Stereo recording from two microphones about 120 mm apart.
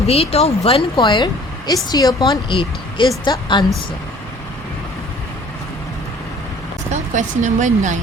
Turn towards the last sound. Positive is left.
turn(degrees=-90)